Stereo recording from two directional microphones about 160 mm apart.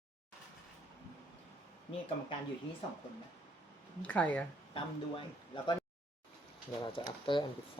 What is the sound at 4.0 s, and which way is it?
Speech, 10° left (ahead or behind).